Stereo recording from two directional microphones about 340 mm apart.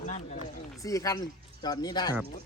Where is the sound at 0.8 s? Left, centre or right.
Centre.